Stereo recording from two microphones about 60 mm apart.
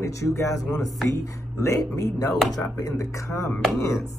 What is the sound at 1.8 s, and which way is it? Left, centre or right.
A man's voice, left.